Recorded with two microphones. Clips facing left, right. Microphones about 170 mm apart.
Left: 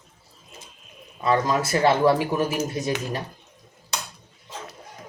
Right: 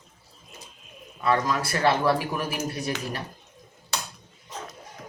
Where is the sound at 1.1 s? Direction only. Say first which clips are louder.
Left 3 dB; 20° left (ahead or behind).